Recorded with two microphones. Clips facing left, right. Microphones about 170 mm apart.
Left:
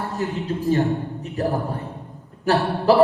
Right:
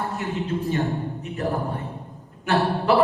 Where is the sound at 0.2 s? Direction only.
35° left (ahead or behind).